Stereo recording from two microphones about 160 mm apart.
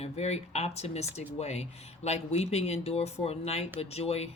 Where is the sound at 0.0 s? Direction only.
40° left (ahead or behind).